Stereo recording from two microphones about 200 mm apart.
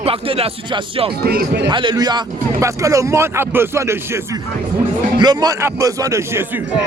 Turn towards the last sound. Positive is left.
turn(degrees=-15)  # may be behind; listen again after turning